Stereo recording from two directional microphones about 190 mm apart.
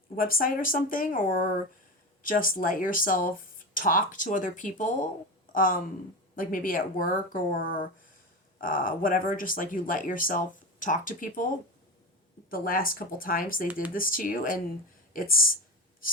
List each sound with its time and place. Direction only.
0.2 s speech: 50° left (ahead or behind)